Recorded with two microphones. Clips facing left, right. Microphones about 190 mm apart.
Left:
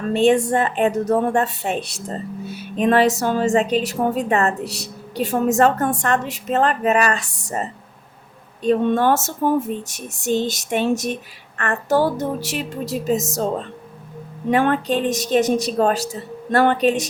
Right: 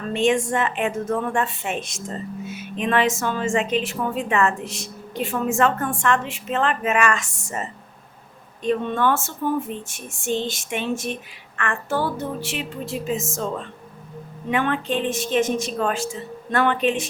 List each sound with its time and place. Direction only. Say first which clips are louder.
0.1 s a woman's voice: left 4 dB; 35° left (ahead or behind)